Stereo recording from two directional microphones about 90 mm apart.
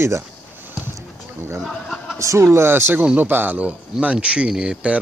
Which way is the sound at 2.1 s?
35° right (ahead or behind).